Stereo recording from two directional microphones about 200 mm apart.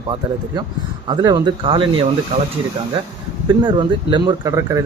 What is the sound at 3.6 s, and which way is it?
Speech, 25° right (ahead or behind).